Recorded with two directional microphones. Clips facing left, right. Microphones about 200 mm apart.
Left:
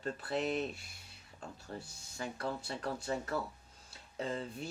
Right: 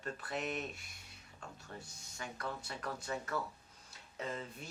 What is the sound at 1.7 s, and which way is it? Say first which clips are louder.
Speech: left 5 dB; 35° left (ahead or behind).